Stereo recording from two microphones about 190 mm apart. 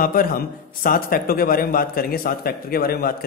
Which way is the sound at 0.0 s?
50° left (ahead or behind).